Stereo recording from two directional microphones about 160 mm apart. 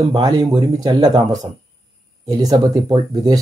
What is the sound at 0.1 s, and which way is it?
Speech, 25° right (ahead or behind).